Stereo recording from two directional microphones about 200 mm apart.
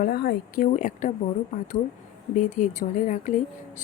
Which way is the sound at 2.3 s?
40° left (ahead or behind).